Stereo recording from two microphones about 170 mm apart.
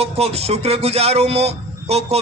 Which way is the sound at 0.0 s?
35° right (ahead or behind).